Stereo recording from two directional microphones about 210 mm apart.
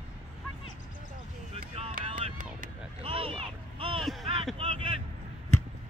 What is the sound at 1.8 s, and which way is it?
Vehicle, 30° right (ahead or behind).